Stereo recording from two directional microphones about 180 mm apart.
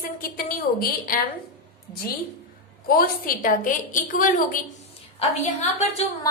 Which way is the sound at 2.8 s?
55° left (ahead or behind).